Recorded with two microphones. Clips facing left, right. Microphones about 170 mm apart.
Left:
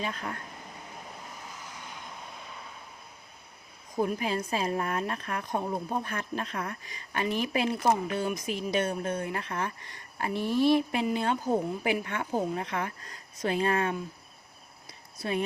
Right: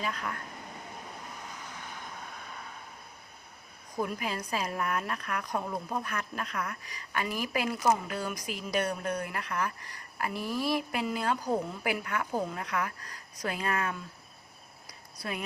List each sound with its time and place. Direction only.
0.0 s a woman's voice: 25° left (ahead or behind)
3.9 s a woman's voice: 30° left (ahead or behind)
15.2 s a woman's voice: 30° left (ahead or behind)